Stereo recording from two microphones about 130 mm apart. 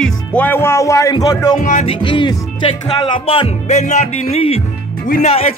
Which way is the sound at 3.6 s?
60° left (ahead or behind).